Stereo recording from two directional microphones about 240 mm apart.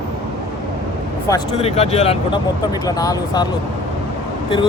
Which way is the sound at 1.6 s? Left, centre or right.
Left.